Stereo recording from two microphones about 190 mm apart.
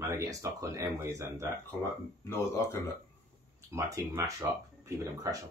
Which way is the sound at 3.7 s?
15° right (ahead or behind).